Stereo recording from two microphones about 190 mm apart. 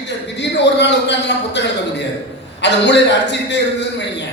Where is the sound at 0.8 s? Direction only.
65° left (ahead or behind).